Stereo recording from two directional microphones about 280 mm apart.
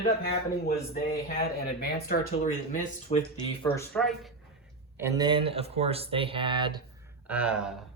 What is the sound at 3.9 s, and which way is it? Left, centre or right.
Speech, centre.